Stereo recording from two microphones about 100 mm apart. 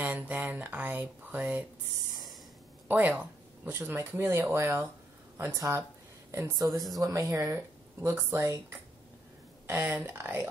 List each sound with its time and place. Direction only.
0.0 s speech: 15° right (ahead or behind)
2.9 s speech: 15° right (ahead or behind)
6.7 s speech: centre (ahead or behind)
7.0 s speech: 35° right (ahead or behind)
9.7 s speech: 25° right (ahead or behind)